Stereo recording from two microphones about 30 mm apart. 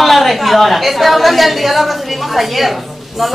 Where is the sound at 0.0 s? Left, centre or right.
Centre.